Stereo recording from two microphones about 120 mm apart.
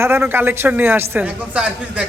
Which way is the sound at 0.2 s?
15° right (ahead or behind).